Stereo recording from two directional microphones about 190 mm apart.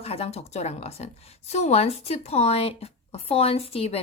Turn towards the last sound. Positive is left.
turn(degrees=30)  # may be behind; listen again after turning